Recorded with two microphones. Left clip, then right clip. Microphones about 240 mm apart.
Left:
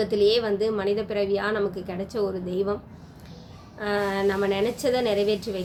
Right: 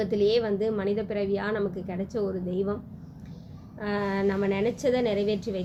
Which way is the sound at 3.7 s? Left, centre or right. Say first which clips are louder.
Left 4 dB; centre.